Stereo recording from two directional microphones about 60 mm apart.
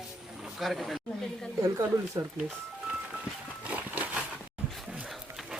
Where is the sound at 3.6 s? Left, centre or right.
Right.